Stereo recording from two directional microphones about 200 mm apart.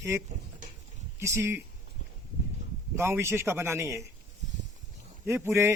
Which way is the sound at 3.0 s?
10° right (ahead or behind).